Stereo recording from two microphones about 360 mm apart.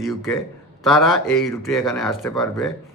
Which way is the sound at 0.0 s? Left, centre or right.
Centre.